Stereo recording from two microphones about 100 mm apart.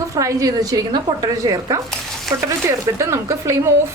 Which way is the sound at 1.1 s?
50° right (ahead or behind).